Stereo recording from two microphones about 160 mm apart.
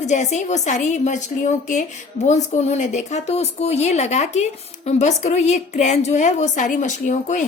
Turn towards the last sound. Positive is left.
turn(degrees=50)  # may be behind; listen again after turning